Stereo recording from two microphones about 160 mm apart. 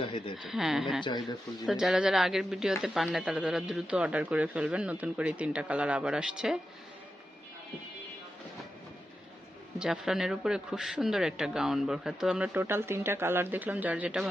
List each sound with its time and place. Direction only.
0.0 s speech: 35° left (ahead or behind)
0.4 s speech: centre (ahead or behind)
1.0 s speech: 25° left (ahead or behind)
1.6 s speech: 5° right (ahead or behind)
9.7 s speech: 5° right (ahead or behind)